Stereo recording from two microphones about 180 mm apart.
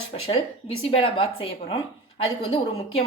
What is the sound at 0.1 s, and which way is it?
A woman's voice, 35° left (ahead or behind).